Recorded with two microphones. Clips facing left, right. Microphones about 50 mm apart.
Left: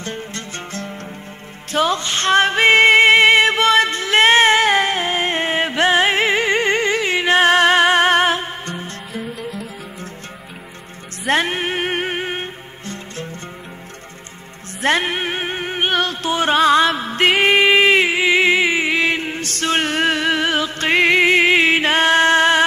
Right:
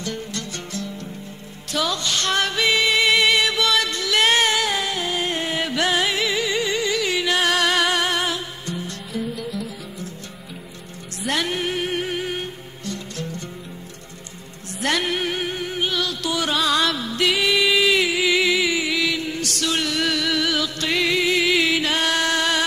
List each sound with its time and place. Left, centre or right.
0.0 s music: left
1.7 s female singing: left
9.3 s music: centre
11.2 s music: left
14.8 s music: left